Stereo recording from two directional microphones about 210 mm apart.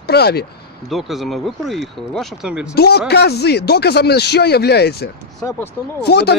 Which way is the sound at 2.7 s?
50° left (ahead or behind).